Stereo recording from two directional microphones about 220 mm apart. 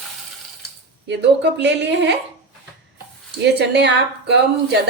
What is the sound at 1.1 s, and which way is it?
A woman's voice, 55° right (ahead or behind).